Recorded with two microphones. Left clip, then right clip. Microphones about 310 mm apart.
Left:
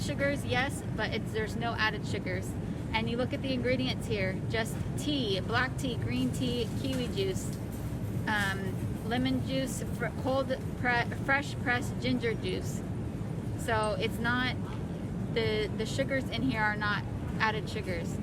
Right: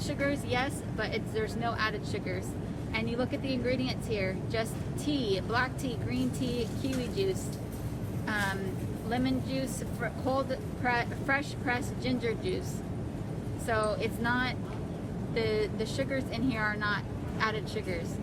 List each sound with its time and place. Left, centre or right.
0.2 s speech: left
8.3 s vehicle: left
9.0 s speech: left
13.7 s speech: left